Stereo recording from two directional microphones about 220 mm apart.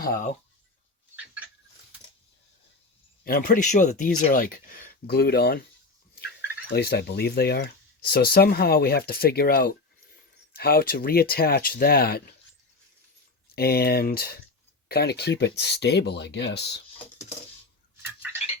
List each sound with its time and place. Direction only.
0.0 s speech: 35° left (ahead or behind)
3.2 s speech: 40° left (ahead or behind)
13.6 s speech: 45° left (ahead or behind)